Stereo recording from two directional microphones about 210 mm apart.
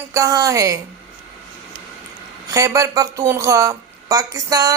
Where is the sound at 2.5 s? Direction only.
15° right (ahead or behind).